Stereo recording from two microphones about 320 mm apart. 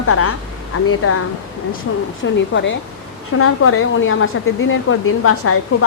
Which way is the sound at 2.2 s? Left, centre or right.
Left.